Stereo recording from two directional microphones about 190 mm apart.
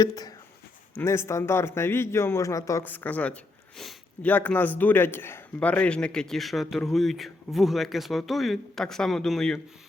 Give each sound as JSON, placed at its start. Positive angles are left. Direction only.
{"t": 0.0, "sound": "speech", "side_deg": 20}